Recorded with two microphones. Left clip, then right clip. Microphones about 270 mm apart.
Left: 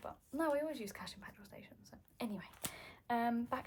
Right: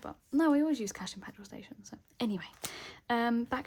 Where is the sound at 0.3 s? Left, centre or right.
Right.